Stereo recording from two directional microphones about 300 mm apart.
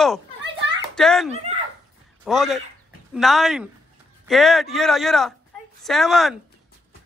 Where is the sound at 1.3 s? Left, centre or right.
Right.